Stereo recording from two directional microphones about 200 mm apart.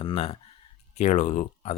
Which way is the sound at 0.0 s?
30° left (ahead or behind).